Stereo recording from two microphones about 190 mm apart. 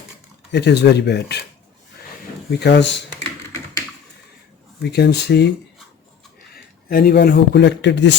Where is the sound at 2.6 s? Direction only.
65° left (ahead or behind).